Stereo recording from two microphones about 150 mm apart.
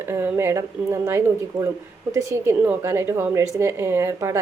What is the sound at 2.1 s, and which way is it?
A woman's voice, 20° right (ahead or behind).